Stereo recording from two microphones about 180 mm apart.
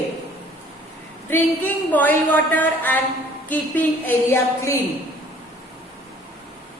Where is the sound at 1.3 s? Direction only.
10° left (ahead or behind).